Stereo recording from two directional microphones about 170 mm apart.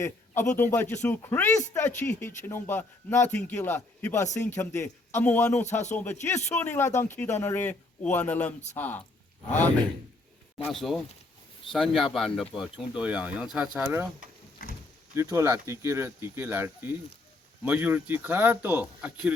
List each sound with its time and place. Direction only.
0.0 s speech: 15° left (ahead or behind)
10.7 s speech: centre (ahead or behind)
14.6 s a sound: 60° left (ahead or behind)
15.1 s speech: 15° right (ahead or behind)